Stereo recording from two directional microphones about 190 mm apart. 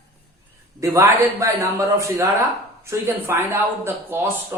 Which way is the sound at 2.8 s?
15° right (ahead or behind).